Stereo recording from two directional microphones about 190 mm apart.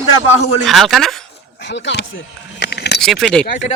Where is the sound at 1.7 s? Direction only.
65° left (ahead or behind).